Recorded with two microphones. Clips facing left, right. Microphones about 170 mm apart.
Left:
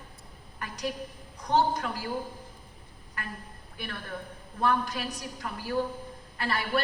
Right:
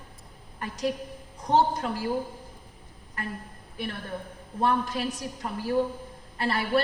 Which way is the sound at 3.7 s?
30° right (ahead or behind).